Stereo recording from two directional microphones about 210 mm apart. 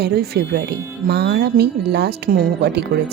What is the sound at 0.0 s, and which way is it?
Speech, 50° right (ahead or behind).